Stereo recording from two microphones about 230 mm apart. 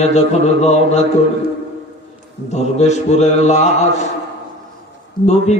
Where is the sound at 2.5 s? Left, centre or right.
Left.